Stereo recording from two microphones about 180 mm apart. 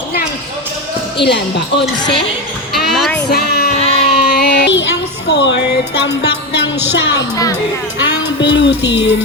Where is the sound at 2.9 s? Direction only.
Centre (ahead or behind).